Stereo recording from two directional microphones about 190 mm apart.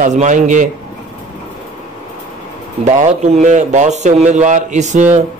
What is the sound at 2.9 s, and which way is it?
A man's voice, 40° right (ahead or behind).